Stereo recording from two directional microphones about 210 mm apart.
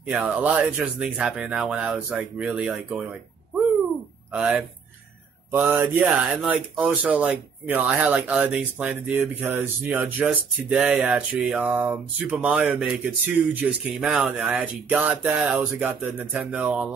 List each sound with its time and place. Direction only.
0.1 s speech: 5° right (ahead or behind)
4.3 s speech: 5° right (ahead or behind)